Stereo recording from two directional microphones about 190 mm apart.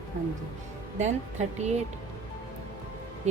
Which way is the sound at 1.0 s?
35° right (ahead or behind).